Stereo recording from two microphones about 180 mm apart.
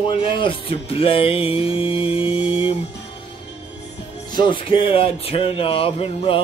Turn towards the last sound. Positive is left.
turn(degrees=30)  # may be behind; listen again after turning